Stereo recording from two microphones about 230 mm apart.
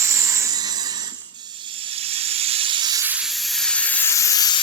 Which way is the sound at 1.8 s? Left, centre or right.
Right.